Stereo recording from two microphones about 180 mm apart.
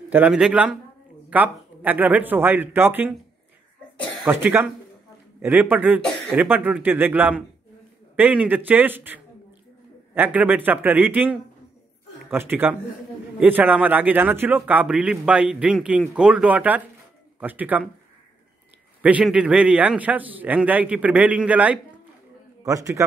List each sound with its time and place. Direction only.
0.1 s a man's voice: 5° right (ahead or behind)
4.3 s a man's voice: 10° right (ahead or behind)
18.9 s a man's voice: 10° right (ahead or behind)